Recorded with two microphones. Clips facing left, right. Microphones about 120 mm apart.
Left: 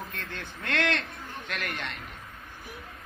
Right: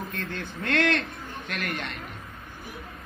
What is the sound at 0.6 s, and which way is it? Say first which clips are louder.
Speech: right 4 dB; 20° left (ahead or behind).